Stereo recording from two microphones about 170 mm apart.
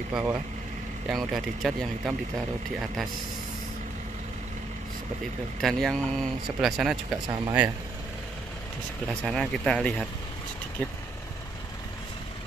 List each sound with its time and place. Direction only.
0.1 s speech: 15° right (ahead or behind)
1.0 s speech: centre (ahead or behind)
5.6 s speech: centre (ahead or behind)
7.2 s speech: 30° right (ahead or behind)
9.2 s speech: 5° left (ahead or behind)